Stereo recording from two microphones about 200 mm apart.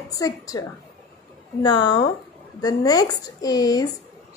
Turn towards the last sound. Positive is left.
turn(degrees=20)  # may be behind; listen again after turning